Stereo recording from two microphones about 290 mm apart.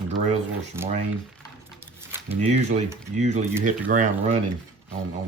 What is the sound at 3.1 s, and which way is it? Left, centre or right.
Speech, right.